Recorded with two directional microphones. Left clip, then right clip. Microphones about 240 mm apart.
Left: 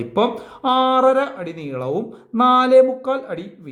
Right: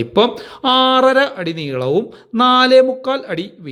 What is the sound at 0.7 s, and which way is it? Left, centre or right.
Speech, right.